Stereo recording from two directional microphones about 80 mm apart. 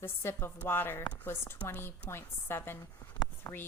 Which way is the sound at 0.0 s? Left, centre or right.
Left.